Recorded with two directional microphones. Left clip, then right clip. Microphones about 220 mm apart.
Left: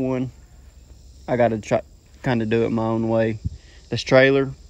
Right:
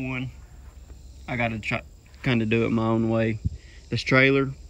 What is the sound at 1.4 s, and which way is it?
Speech, 50° left (ahead or behind).